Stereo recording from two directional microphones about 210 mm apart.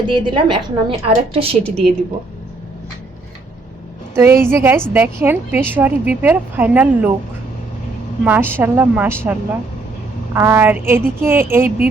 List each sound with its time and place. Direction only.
0.1 s a woman's voice: 25° right (ahead or behind)
1.6 s a woman's voice: 5° left (ahead or behind)
4.1 s a woman's voice: 10° right (ahead or behind)
8.2 s a woman's voice: 10° right (ahead or behind)
10.3 s a woman's voice: 10° right (ahead or behind)